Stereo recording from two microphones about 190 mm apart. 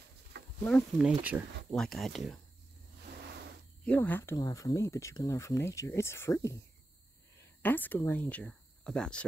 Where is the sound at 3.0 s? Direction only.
60° right (ahead or behind).